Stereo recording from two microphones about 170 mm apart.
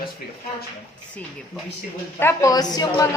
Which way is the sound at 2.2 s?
15° left (ahead or behind).